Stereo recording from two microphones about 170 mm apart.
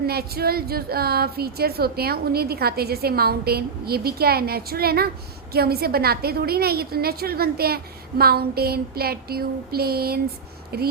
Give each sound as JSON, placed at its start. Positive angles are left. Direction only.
{"t": 0.1, "sound": "a woman's voice", "side_deg": -65}